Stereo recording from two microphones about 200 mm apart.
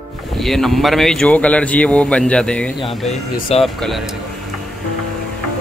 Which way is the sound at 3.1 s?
30° left (ahead or behind).